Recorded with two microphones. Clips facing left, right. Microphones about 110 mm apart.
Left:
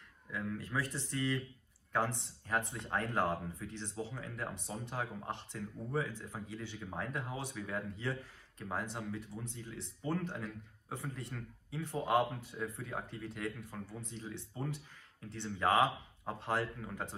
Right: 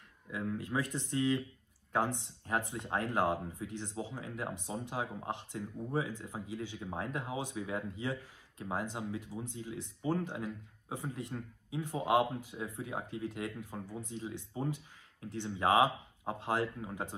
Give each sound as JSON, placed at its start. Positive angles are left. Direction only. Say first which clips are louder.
{"t": 0.3, "sound": "speech", "louder": "right 3 dB", "side_deg": -15}